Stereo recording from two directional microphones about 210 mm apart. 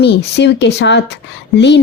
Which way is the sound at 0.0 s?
50° left (ahead or behind).